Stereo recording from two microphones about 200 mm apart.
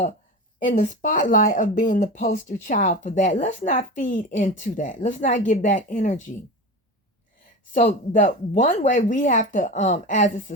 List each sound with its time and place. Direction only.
0.6 s speech: 40° left (ahead or behind)
7.7 s speech: 40° left (ahead or behind)